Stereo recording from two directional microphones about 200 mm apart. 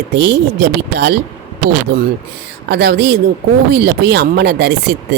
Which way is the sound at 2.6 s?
55° right (ahead or behind).